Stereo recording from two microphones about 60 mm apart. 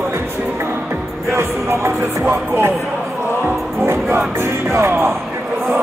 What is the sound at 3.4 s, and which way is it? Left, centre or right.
Music, right.